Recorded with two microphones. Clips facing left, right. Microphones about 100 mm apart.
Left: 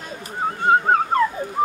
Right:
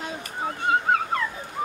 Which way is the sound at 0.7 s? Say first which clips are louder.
Left 5 dB; 40° left (ahead or behind).